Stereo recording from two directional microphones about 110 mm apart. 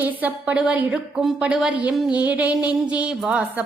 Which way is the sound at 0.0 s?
15° right (ahead or behind).